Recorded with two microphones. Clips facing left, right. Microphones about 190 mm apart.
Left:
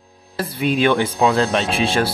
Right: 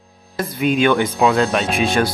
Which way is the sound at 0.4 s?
30° left (ahead or behind).